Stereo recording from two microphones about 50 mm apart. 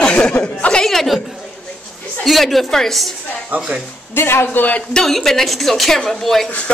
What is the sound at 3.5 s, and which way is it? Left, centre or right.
Speech, right.